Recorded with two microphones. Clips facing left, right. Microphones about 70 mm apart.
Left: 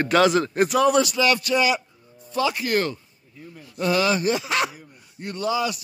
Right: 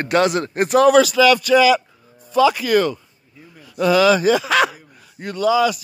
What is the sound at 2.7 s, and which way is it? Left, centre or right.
Speech, right.